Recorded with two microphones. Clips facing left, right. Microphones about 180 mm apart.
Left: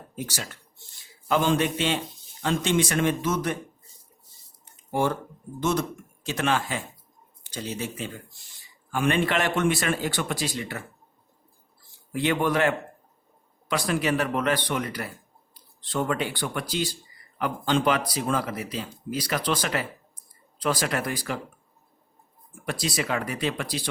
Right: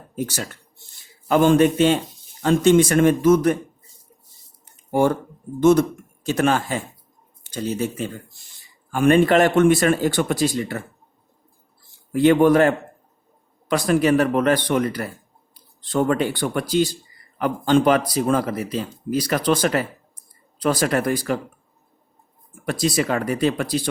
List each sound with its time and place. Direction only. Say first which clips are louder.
0.2 s speech: right 7 dB; 50° right (ahead or behind)
4.9 s speech: right 7 dB; 50° right (ahead or behind)
12.1 s speech: right 10 dB; 45° right (ahead or behind)
22.6 s speech: right 7 dB; 45° right (ahead or behind)